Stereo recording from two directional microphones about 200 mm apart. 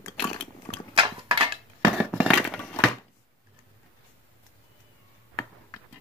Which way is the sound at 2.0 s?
Centre (ahead or behind).